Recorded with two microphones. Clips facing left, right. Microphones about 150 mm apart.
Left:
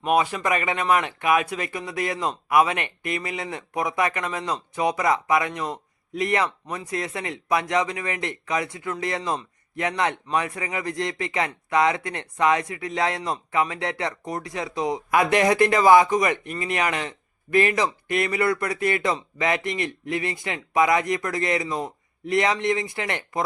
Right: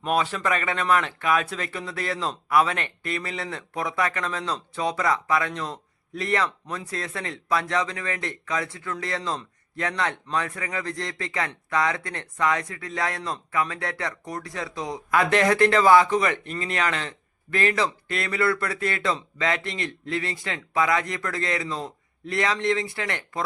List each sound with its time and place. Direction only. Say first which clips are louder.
0.0 s speech: left 3 dB; 10° left (ahead or behind)